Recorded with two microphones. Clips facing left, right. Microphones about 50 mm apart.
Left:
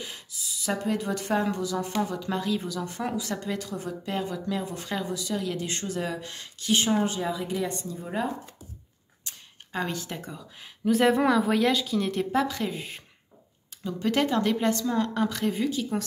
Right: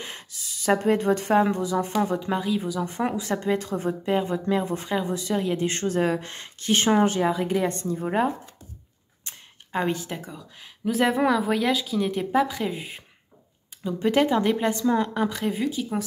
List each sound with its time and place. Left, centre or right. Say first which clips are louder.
0.0 s a woman's voice: right 1 dB; right; by 2.8 s centre
2.8 s speech: right 4 dB; right
9.7 s speech: right 5 dB; right
10.0 s speech: right 2 dB; centre
14.1 s a woman's voice: right 3 dB; centre